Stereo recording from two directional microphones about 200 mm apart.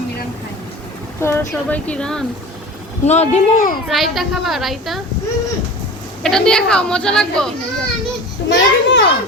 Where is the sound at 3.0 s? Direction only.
35° left (ahead or behind).